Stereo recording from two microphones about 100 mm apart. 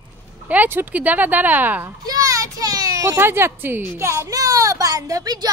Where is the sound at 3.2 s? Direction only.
25° right (ahead or behind); by 5.5 s 45° right (ahead or behind).